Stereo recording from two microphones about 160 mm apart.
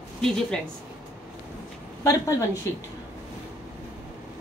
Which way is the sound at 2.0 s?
20° left (ahead or behind).